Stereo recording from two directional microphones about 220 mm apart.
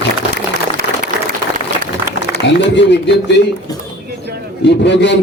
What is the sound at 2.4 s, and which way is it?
Speech, 55° left (ahead or behind).